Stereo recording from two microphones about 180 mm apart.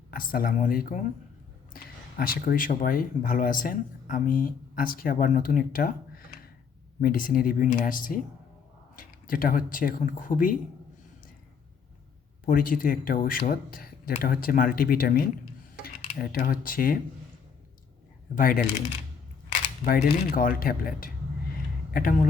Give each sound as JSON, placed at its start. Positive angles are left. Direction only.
{"t": 0.1, "sound": "speech", "side_deg": 50}
{"t": 12.5, "sound": "speech", "side_deg": 50}
{"t": 15.7, "sound": "a sound", "side_deg": 45}
{"t": 16.1, "sound": "speech", "side_deg": 55}
{"t": 18.3, "sound": "speech", "side_deg": 50}
{"t": 19.8, "sound": "speech", "side_deg": 50}